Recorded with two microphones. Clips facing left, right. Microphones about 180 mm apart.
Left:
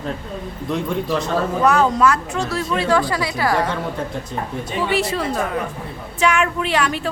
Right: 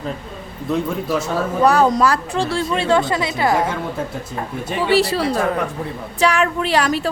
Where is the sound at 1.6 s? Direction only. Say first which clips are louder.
Right 2 dB; 35° right (ahead or behind).